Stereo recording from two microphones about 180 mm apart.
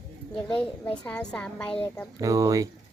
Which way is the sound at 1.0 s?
5° left (ahead or behind).